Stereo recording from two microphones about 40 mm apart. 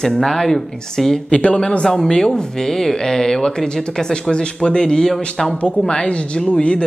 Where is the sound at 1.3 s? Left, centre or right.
Left.